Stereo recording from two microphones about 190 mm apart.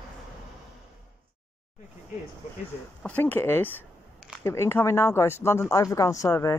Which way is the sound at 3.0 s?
10° left (ahead or behind).